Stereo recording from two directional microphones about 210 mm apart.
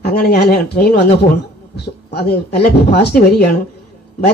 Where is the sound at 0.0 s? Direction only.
50° left (ahead or behind).